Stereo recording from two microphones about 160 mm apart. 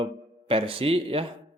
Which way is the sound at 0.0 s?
35° right (ahead or behind).